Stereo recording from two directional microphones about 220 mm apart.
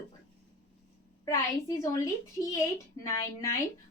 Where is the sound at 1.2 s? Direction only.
15° left (ahead or behind).